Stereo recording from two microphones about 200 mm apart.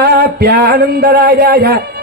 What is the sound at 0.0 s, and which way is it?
Speech, 55° right (ahead or behind).